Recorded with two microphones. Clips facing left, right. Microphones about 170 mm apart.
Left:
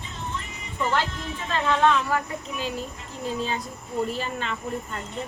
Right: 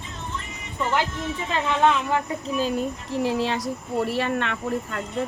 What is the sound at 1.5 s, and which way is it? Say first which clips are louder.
Speech: even; 15° right (ahead or behind).